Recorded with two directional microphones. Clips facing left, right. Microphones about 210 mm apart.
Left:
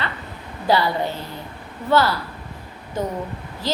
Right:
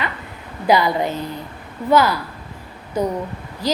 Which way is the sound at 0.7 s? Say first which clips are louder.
Right 3 dB; 15° right (ahead or behind).